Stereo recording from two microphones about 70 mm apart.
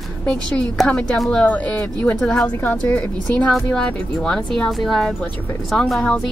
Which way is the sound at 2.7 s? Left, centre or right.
Centre.